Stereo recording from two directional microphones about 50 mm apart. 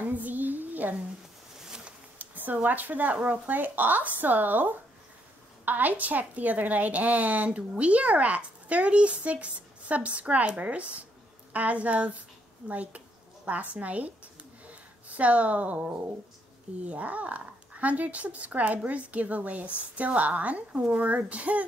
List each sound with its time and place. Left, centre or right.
0.0 s child singing: right
2.1 s a woman's voice: right
15.1 s a woman's voice: right